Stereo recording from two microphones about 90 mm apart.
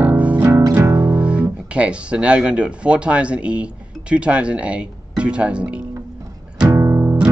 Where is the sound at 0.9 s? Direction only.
15° right (ahead or behind).